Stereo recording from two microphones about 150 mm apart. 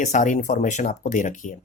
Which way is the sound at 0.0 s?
55° left (ahead or behind).